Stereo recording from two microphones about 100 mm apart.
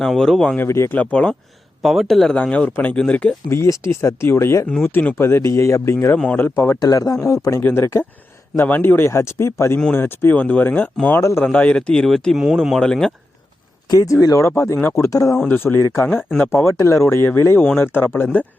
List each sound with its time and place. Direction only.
0.0 s speech: 5° left (ahead or behind)
0.5 s speech: 25° left (ahead or behind)
0.9 s speech: 10° left (ahead or behind)
1.8 s speech: centre (ahead or behind)
3.5 s speech: 30° left (ahead or behind)
6.7 s speech: 35° left (ahead or behind)
9.7 s speech: 15° left (ahead or behind)
11.2 s speech: 30° left (ahead or behind)
11.4 s speech: 10° left (ahead or behind)
13.9 s speech: 35° left (ahead or behind); by 18.4 s 20° left (ahead or behind)